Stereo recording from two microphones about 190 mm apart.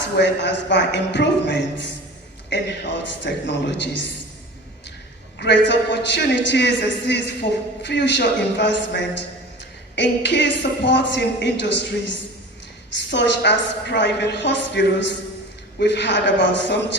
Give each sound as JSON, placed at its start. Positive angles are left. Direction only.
{"t": 0.0, "sound": "a woman's voice", "side_deg": 65}
{"t": 5.4, "sound": "a woman's voice", "side_deg": 65}